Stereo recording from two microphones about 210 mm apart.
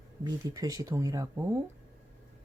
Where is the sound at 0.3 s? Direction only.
15° right (ahead or behind).